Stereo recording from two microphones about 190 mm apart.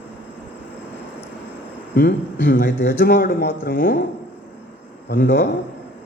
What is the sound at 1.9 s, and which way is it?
A man's voice, 50° left (ahead or behind).